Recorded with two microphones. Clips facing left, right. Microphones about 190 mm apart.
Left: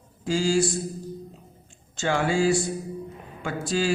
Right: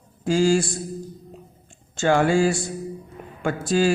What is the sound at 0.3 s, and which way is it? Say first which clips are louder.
Speech: right 4 dB; 50° right (ahead or behind).